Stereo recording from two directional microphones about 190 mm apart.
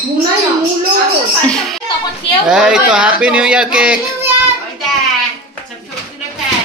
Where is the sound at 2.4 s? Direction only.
5° right (ahead or behind).